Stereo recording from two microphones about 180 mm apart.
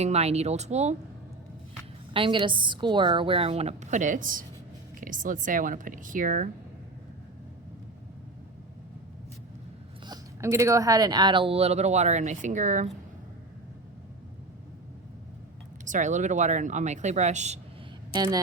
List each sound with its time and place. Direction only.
0.0 s speech: 35° right (ahead or behind)
2.1 s a woman's voice: 30° right (ahead or behind); by 6.5 s 50° right (ahead or behind)
10.1 s speech: 15° right (ahead or behind); by 12.9 s 45° right (ahead or behind)
15.8 s speech: 45° right (ahead or behind)
18.1 s speech: 25° right (ahead or behind)